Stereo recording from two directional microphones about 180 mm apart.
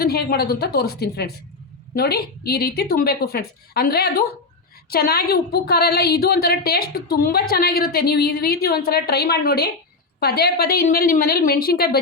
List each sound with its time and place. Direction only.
0.0 s a woman's voice: 60° left (ahead or behind)